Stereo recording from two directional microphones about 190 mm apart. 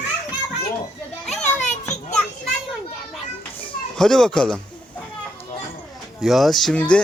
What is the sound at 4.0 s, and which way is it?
Speech, 5° left (ahead or behind).